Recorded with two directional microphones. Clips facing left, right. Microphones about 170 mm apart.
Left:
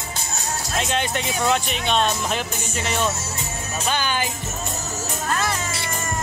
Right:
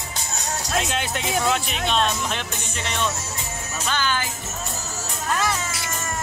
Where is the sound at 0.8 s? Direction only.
Centre (ahead or behind).